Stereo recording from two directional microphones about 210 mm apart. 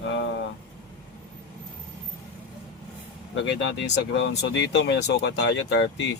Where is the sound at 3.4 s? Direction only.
55° left (ahead or behind).